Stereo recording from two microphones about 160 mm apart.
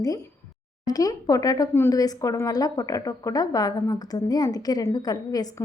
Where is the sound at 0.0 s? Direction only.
20° left (ahead or behind).